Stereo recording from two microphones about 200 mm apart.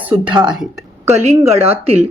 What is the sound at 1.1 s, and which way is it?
Speech, 35° right (ahead or behind).